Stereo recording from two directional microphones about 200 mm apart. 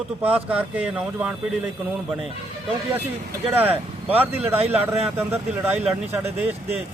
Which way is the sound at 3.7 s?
30° right (ahead or behind).